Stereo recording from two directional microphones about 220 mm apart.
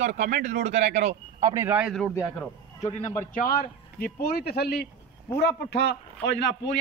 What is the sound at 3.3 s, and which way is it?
A man's voice, 40° left (ahead or behind).